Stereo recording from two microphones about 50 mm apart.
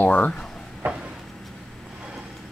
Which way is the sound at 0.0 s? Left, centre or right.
Left.